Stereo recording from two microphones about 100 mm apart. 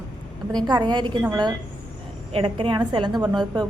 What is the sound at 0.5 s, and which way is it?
Speech, 45° right (ahead or behind).